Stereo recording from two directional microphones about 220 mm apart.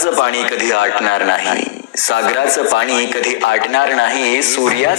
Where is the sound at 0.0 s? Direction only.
55° left (ahead or behind).